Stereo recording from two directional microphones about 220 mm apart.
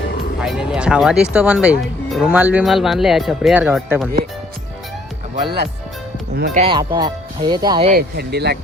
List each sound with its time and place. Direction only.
0.4 s speech: 5° right (ahead or behind)
6.3 s speech: 45° right (ahead or behind)
6.6 s speech: 20° right (ahead or behind)
7.9 s speech: 45° right (ahead or behind)